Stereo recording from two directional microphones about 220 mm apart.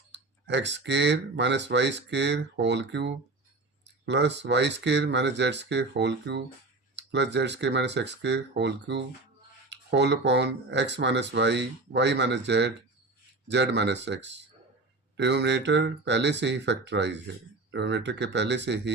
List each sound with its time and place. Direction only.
0.1 s speech: 55° right (ahead or behind)